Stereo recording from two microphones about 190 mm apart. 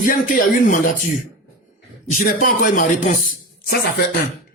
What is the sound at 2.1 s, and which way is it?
Speech, 45° left (ahead or behind).